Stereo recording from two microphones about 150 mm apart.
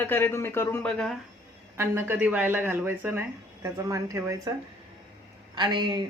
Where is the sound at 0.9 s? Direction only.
5° left (ahead or behind).